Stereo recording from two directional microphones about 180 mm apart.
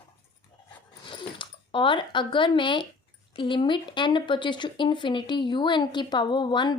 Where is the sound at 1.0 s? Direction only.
25° left (ahead or behind).